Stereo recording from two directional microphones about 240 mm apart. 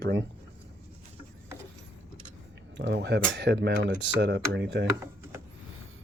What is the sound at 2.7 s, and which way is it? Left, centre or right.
Speech, right.